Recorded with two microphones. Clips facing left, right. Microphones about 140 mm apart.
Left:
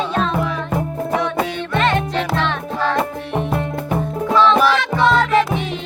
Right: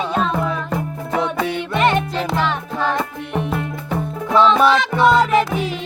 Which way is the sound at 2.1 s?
5° right (ahead or behind).